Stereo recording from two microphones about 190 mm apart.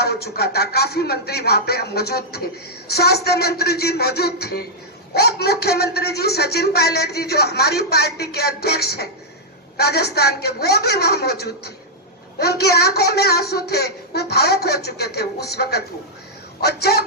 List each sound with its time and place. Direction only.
0.0 s speech: 55° left (ahead or behind)